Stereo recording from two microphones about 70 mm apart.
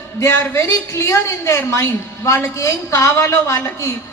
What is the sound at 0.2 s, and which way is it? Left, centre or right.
A woman's voice, left.